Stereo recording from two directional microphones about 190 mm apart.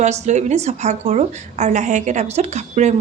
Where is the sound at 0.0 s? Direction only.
40° right (ahead or behind).